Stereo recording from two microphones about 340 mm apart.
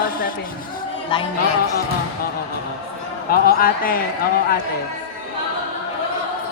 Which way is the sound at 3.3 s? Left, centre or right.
Left.